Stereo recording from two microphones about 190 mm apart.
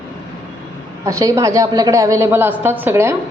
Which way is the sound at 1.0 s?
15° right (ahead or behind).